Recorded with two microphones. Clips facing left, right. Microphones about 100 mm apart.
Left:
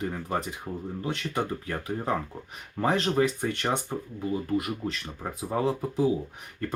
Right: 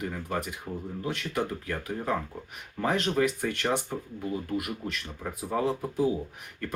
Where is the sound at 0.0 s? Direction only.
30° left (ahead or behind).